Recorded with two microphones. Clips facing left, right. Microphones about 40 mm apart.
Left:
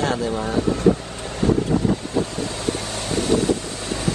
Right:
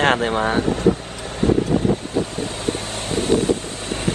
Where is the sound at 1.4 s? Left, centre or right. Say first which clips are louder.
Right 1 dB; right.